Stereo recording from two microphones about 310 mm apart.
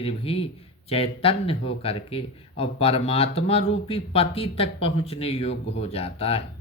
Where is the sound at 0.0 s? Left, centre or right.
Centre.